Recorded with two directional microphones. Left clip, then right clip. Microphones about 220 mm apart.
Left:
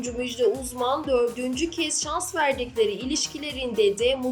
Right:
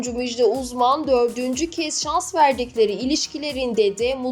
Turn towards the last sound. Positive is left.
turn(degrees=-20)  # may be behind; listen again after turning